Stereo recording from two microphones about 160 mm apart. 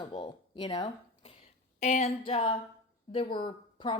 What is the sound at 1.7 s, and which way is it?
Speech, 50° left (ahead or behind).